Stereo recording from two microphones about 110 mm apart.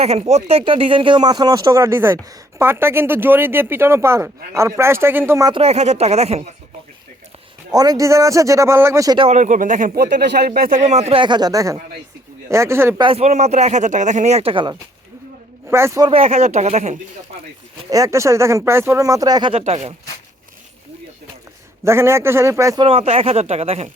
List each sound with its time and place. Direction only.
0.0 s speech: 70° right (ahead or behind); by 5.5 s 20° right (ahead or behind)
5.5 s speech: 75° right (ahead or behind)
7.7 s speech: 35° right (ahead or behind)
10.8 s speech: 90° right
11.2 s speech: 40° right (ahead or behind); by 13.0 s 20° right (ahead or behind)
13.1 s speech: 80° right
15.7 s speech: 25° right (ahead or behind)
16.0 s speech: 60° right (ahead or behind); by 17.0 s 90° right
17.9 s speech: 30° right (ahead or behind)
19.5 s speech: 65° right (ahead or behind)
21.8 s speech: 25° right (ahead or behind)
22.8 s speech: 60° right (ahead or behind)